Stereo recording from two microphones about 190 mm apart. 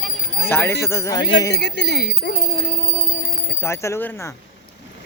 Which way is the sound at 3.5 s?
15° left (ahead or behind).